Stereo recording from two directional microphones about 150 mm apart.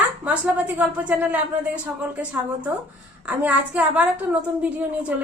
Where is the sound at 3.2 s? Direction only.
10° right (ahead or behind).